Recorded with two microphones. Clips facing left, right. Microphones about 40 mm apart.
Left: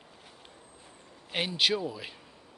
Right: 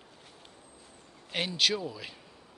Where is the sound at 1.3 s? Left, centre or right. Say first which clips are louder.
Left 1 dB; centre.